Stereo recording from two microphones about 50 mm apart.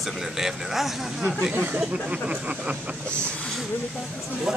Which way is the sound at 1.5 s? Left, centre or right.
Right.